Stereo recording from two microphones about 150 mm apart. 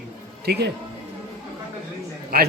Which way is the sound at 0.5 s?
90° right.